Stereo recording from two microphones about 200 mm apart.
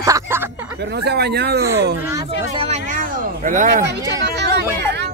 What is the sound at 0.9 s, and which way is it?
Speech, 55° right (ahead or behind).